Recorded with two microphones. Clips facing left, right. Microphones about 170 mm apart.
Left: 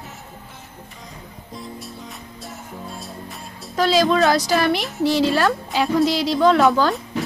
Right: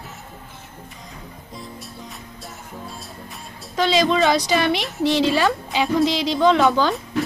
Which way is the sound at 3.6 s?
Centre (ahead or behind).